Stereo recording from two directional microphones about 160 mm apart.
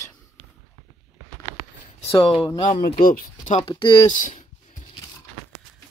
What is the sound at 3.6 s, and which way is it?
Speech, 30° left (ahead or behind).